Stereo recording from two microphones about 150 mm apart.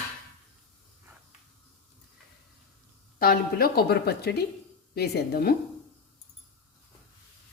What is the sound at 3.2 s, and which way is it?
A woman's voice, 90° left.